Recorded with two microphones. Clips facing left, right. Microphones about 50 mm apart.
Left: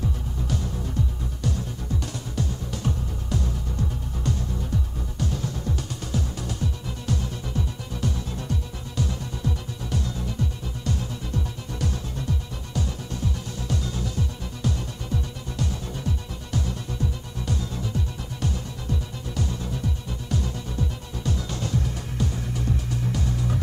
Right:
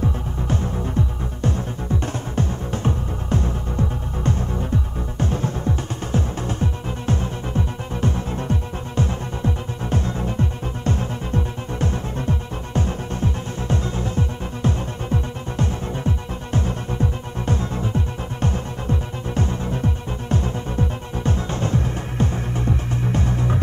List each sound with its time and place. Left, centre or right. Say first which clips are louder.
0.0 s music: right 6 dB; right